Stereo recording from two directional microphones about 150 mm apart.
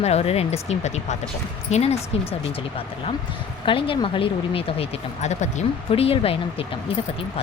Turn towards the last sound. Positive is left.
turn(degrees=40)  # may be behind; listen again after turning